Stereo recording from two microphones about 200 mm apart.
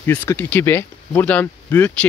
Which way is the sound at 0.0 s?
10° left (ahead or behind).